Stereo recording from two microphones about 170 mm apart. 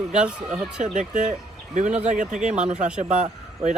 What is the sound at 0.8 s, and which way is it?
Speech, 45° right (ahead or behind).